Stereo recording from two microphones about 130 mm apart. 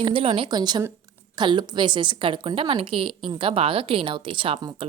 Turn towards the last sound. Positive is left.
turn(degrees=-30)  # may be behind; listen again after turning